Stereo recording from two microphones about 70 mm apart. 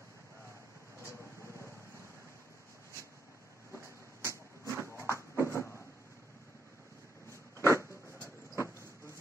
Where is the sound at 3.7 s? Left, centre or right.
Left.